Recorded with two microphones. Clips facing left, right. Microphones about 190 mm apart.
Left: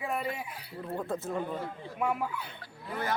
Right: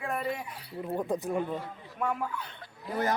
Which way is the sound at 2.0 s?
10° left (ahead or behind).